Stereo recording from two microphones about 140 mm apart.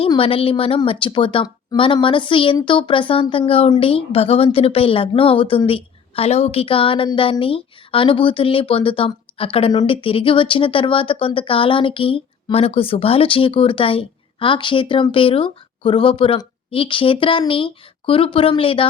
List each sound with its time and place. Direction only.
0.2 s a woman's voice: 40° left (ahead or behind)